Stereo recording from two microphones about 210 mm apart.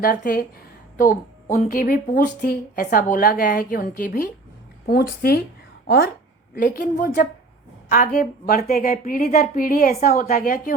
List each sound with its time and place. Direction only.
0.0 s a woman's voice: 40° left (ahead or behind)
6.6 s a woman's voice: 40° left (ahead or behind)